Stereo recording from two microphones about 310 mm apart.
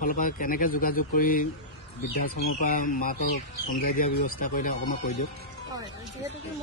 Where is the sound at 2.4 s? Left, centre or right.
Left.